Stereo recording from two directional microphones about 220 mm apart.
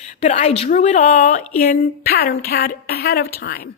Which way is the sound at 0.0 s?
30° left (ahead or behind).